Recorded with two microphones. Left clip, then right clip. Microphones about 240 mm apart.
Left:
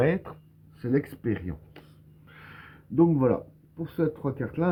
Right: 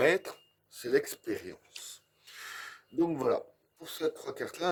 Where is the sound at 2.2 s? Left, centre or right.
Right.